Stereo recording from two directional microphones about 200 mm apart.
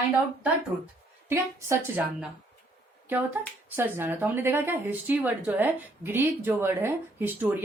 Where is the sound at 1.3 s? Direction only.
15° right (ahead or behind).